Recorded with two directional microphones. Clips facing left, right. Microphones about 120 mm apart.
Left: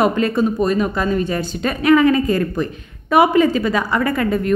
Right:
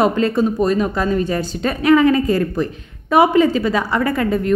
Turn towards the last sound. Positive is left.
turn(degrees=-30)  # may be behind; listen again after turning